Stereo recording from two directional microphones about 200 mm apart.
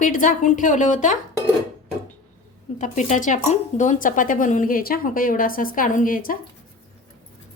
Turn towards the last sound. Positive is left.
turn(degrees=45)  # may be behind; listen again after turning